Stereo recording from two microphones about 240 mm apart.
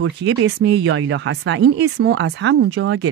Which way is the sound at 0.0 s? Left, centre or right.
Right.